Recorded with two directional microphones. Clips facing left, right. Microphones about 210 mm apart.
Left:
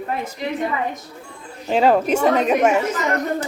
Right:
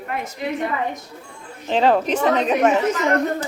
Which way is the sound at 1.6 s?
10° left (ahead or behind).